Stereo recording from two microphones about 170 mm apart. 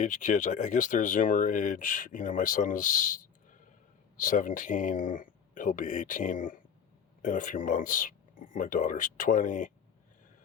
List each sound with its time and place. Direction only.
0.0 s speech: 50° left (ahead or behind)